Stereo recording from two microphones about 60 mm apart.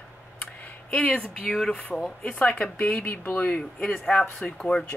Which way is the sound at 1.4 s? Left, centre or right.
Centre.